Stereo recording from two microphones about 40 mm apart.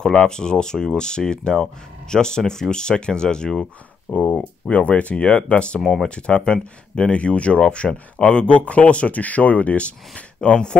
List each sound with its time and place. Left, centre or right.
0.0 s speech: centre
4.1 s speech: left